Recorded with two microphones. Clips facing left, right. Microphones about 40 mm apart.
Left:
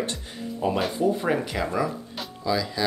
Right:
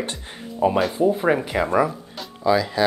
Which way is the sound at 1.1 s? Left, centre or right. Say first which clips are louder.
Right 4 dB; centre.